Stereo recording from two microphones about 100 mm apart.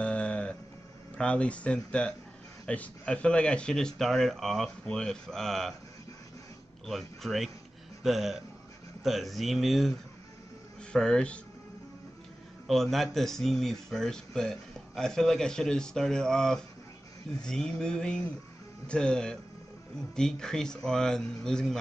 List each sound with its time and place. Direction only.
0.0 s a sound: 10° left (ahead or behind)
1.1 s speech: 10° left (ahead or behind)
6.9 s speech: centre (ahead or behind)
12.6 s speech: centre (ahead or behind)